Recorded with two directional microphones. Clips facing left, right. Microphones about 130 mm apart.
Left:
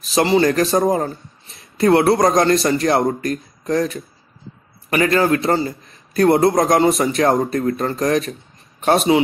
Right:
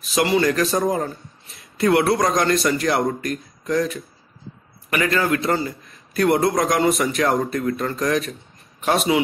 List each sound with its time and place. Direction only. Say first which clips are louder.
0.1 s a man's voice: left 3 dB; 30° left (ahead or behind)